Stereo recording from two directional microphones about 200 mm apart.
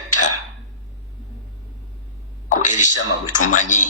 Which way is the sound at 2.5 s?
40° left (ahead or behind).